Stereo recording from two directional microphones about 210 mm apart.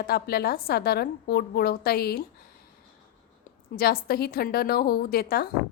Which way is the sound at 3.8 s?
45° left (ahead or behind).